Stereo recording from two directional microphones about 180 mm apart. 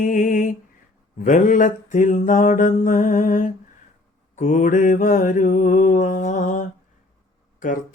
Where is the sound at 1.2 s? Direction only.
45° left (ahead or behind).